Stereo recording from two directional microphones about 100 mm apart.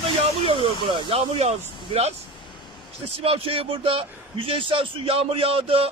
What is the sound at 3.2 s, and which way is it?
A man's voice, 70° right (ahead or behind).